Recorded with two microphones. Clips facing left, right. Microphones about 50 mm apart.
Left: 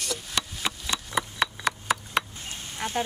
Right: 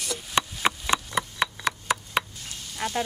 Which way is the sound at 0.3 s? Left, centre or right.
Right.